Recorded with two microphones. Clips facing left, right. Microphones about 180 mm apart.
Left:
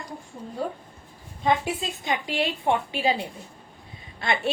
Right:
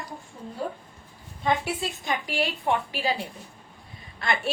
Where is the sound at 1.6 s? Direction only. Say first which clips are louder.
Left 1 dB; 20° left (ahead or behind).